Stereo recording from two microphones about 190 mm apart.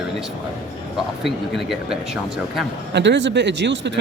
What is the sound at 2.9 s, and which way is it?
Speech, 70° right (ahead or behind).